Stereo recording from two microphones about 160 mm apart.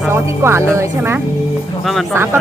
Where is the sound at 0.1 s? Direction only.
15° right (ahead or behind).